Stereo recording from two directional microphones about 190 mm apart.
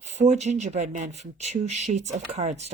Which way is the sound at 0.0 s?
35° right (ahead or behind).